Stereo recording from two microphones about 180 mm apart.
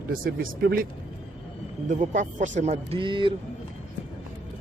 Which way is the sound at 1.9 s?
45° right (ahead or behind).